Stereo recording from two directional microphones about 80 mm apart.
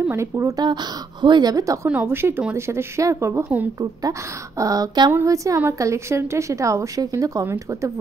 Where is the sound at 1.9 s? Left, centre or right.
Right.